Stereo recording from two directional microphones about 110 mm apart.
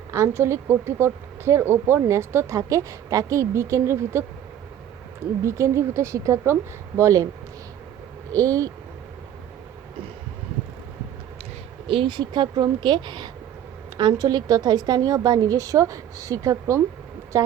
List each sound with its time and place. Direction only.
0.1 s speech: 25° right (ahead or behind)
5.4 s speech: 25° right (ahead or behind)
8.3 s a woman's voice: 30° right (ahead or behind)
11.9 s a woman's voice: 50° right (ahead or behind); by 17.5 s 30° right (ahead or behind)